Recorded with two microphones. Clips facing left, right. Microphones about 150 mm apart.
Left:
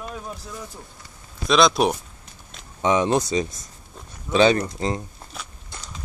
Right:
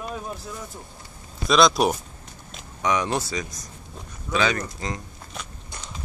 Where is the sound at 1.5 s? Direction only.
Centre (ahead or behind).